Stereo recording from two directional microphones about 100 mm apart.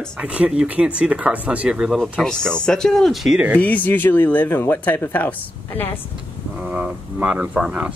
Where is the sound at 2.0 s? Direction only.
5° left (ahead or behind).